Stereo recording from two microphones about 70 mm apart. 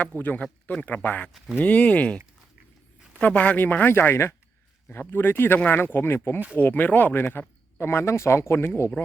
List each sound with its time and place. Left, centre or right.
0.2 s speech: left
0.4 s a man's voice: centre
0.9 s speech: left